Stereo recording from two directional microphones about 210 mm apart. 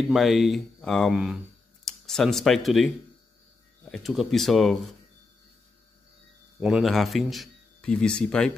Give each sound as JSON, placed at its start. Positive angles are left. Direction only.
{"t": 0.1, "sound": "speech", "side_deg": 0}
{"t": 3.9, "sound": "speech", "side_deg": 0}
{"t": 6.6, "sound": "speech", "side_deg": 0}